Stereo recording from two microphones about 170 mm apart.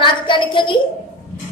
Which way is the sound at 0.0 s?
30° left (ahead or behind).